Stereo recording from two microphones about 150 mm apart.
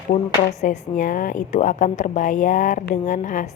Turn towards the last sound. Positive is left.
turn(degrees=55)  # may be behind; listen again after turning